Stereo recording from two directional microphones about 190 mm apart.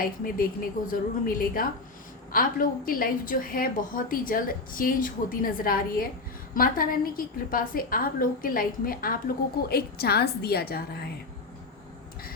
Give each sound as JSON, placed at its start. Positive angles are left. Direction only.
{"t": 0.0, "sound": "a woman's voice", "side_deg": 50}